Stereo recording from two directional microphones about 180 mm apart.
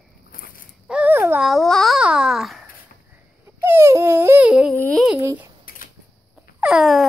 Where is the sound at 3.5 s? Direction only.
15° right (ahead or behind).